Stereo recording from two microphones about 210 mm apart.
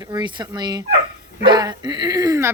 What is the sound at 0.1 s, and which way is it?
A woman's voice, 20° right (ahead or behind).